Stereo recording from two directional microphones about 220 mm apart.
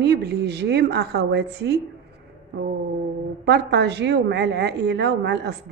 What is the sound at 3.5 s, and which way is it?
Speech, 50° right (ahead or behind).